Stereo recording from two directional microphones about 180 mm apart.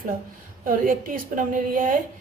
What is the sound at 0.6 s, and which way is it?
A woman's voice, 50° right (ahead or behind).